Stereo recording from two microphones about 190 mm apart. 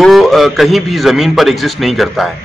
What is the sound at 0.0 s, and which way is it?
A man's voice, centre (ahead or behind).